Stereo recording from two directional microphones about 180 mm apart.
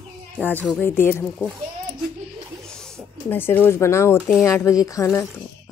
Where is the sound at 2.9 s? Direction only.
10° left (ahead or behind).